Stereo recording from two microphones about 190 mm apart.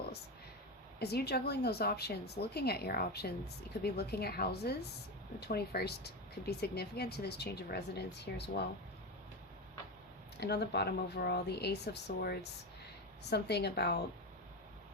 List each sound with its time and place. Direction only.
0.9 s speech: 60° left (ahead or behind)
10.4 s speech: 60° left (ahead or behind)